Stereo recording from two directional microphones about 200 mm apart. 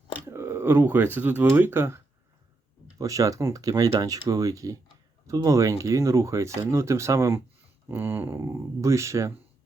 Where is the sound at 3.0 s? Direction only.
15° right (ahead or behind).